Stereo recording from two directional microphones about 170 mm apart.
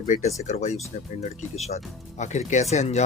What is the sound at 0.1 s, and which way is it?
Speech, 45° left (ahead or behind).